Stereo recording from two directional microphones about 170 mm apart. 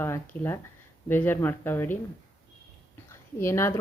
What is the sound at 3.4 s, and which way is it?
Speech, 15° left (ahead or behind).